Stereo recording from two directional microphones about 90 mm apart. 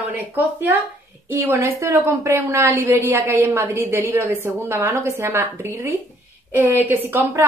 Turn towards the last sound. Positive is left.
turn(degrees=-25)  # may be behind; listen again after turning